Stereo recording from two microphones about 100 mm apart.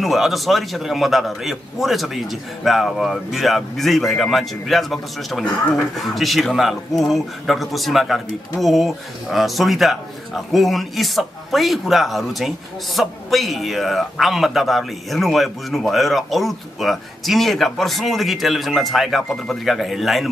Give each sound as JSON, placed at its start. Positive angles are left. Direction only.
{"t": 0.0, "sound": "speech", "side_deg": 0}